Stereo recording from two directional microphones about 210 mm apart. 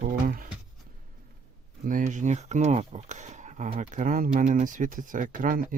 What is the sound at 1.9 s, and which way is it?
Speech, 40° right (ahead or behind).